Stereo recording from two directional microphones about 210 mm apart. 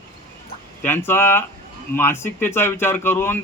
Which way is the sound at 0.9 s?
10° left (ahead or behind).